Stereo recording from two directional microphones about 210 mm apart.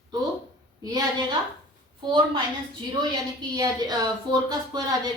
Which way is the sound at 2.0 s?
20° right (ahead or behind).